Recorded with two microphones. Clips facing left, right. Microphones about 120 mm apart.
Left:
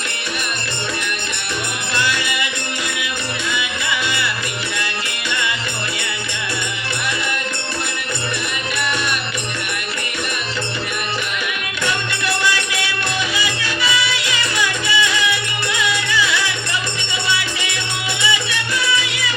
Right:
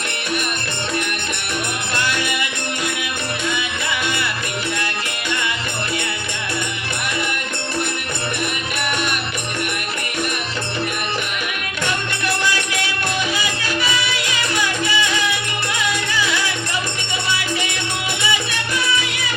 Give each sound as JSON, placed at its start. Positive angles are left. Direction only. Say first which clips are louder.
{"t": 2.0, "sound": "music", "louder": "left 1 dB", "side_deg": -50}
{"t": 12.5, "sound": "music", "louder": "even", "side_deg": -45}